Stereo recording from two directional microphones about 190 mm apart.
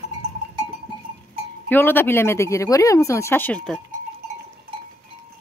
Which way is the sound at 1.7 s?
10° left (ahead or behind).